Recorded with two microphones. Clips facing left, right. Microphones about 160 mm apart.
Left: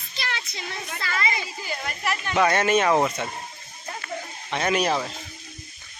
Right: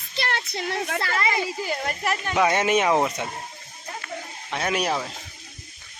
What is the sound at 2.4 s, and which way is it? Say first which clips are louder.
Speech: left 1 dB; 15° right (ahead or behind).